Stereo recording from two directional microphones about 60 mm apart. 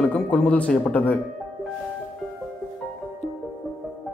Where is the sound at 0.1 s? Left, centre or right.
Left.